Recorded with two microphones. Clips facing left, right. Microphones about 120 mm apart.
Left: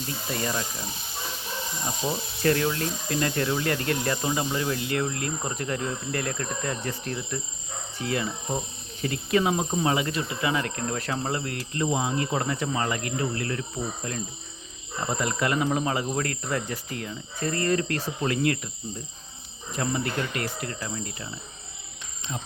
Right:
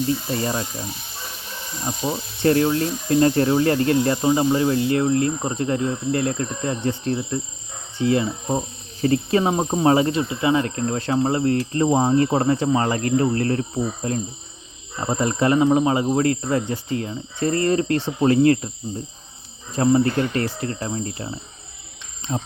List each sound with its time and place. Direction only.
0.3 s speech: 30° right (ahead or behind)
1.8 s speech: 25° right (ahead or behind)
19.7 s speech: 30° right (ahead or behind)